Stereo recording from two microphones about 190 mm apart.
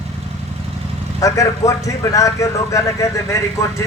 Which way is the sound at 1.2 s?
20° left (ahead or behind).